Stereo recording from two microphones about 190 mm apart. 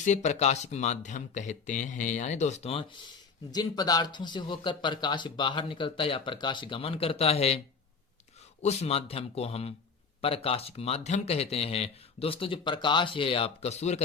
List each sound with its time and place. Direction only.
0.0 s speech: 40° left (ahead or behind)
3.5 s speech: 20° left (ahead or behind)
8.6 s speech: 30° left (ahead or behind)